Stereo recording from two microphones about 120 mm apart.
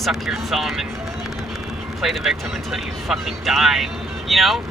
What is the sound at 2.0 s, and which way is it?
Speech, centre (ahead or behind).